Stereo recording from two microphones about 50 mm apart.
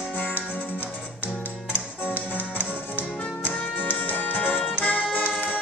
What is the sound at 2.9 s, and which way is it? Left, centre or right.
Music, left.